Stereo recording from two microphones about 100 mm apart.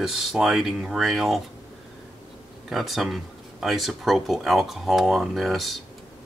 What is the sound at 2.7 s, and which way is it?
Speech, centre (ahead or behind).